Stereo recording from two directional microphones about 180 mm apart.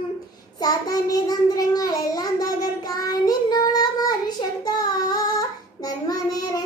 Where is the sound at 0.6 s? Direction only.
20° left (ahead or behind).